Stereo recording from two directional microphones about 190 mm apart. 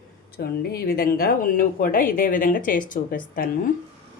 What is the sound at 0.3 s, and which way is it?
A woman's voice, 55° left (ahead or behind).